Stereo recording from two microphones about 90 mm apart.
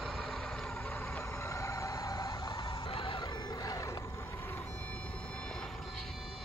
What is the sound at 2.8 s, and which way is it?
Music, 70° left (ahead or behind).